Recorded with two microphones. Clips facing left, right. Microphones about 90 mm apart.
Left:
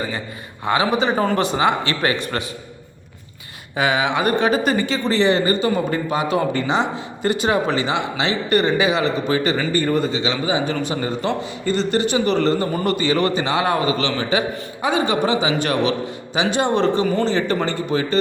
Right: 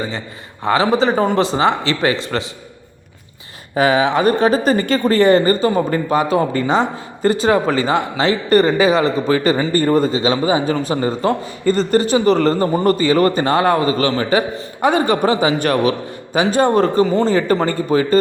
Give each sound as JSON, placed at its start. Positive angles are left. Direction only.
{"t": 0.6, "sound": "speech", "side_deg": -35}
{"t": 3.8, "sound": "a man's voice", "side_deg": -35}